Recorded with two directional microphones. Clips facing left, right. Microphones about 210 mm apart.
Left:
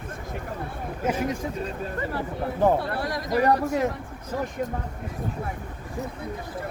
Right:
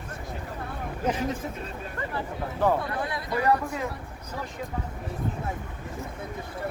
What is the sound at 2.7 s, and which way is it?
Speech, 40° left (ahead or behind).